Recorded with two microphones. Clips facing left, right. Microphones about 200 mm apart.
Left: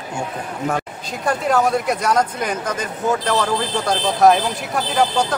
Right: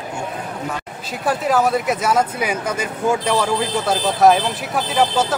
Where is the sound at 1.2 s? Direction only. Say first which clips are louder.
Even; centre (ahead or behind).